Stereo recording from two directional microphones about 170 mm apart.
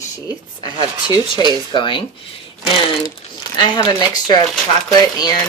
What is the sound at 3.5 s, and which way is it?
Speech, 25° left (ahead or behind).